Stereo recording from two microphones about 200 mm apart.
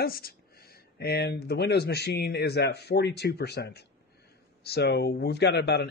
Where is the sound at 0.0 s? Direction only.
50° left (ahead or behind).